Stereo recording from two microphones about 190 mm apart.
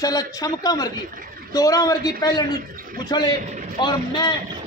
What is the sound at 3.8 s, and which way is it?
Speech, 25° left (ahead or behind).